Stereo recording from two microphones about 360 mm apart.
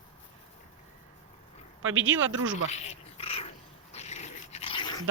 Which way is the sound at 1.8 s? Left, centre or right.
Right.